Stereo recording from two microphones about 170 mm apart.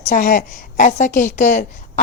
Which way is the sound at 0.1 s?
50° left (ahead or behind).